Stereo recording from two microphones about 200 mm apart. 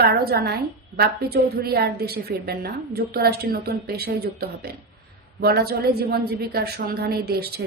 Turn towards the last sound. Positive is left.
turn(degrees=-50)  # may be behind; listen again after turning